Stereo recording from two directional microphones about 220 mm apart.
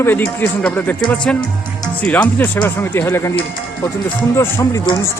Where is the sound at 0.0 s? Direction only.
10° left (ahead or behind).